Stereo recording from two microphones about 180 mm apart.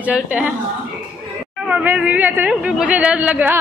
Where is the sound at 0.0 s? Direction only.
5° right (ahead or behind).